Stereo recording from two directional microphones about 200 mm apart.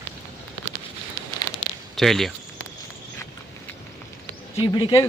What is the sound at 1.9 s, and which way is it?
Speech, centre (ahead or behind).